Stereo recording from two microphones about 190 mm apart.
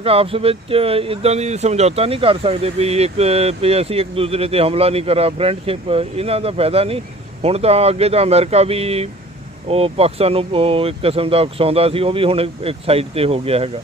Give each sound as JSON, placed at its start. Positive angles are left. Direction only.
{"t": 0.0, "sound": "speech", "side_deg": -30}